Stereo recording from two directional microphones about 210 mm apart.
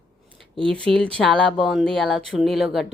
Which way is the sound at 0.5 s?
25° right (ahead or behind).